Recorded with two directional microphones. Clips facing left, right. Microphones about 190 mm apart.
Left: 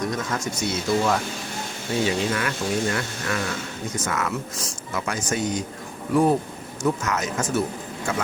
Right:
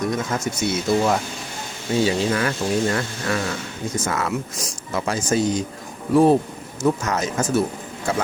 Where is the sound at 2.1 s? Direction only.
35° right (ahead or behind).